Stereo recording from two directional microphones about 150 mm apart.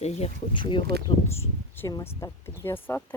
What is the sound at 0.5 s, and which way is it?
Speech, 35° left (ahead or behind).